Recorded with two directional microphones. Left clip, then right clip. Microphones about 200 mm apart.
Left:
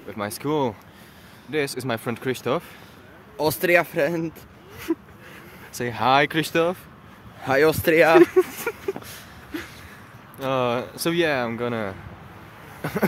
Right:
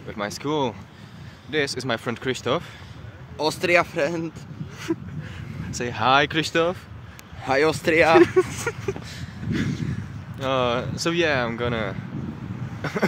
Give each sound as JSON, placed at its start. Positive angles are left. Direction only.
{"t": 0.1, "sound": "speech", "side_deg": 0}
{"t": 3.3, "sound": "speech", "side_deg": 25}
{"t": 5.7, "sound": "speech", "side_deg": 5}
{"t": 7.4, "sound": "speech", "side_deg": 25}
{"t": 8.2, "sound": "speech", "side_deg": 0}
{"t": 9.5, "sound": "a sound", "side_deg": 5}
{"t": 10.4, "sound": "speech", "side_deg": 0}
{"t": 12.8, "sound": "a sound", "side_deg": 0}